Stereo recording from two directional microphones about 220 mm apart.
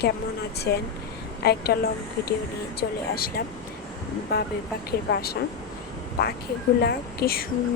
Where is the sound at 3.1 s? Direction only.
45° left (ahead or behind).